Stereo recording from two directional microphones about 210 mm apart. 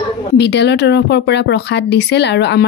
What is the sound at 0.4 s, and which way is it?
Speech, 55° left (ahead or behind).